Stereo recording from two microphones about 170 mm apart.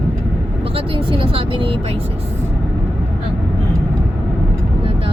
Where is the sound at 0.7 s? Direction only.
30° right (ahead or behind).